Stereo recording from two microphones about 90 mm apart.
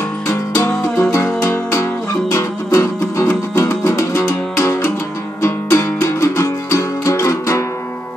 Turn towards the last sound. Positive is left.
turn(degrees=35)  # may be behind; listen again after turning